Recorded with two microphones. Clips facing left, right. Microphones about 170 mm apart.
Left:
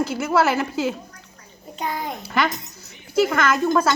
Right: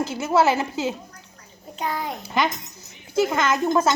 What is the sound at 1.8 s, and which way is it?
Speech, centre (ahead or behind).